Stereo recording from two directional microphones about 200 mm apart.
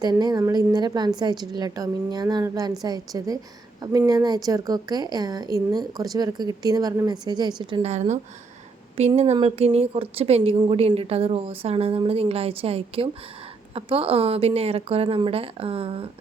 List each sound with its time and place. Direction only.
0.0 s a woman's voice: 20° right (ahead or behind)